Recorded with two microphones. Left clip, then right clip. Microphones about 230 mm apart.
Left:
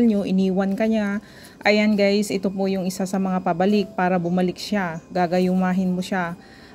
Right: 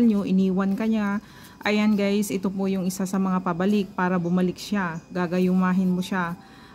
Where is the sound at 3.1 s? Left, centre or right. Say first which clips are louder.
Left 3 dB; right.